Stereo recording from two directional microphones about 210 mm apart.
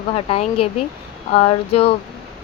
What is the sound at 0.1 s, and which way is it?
Speech, 30° left (ahead or behind).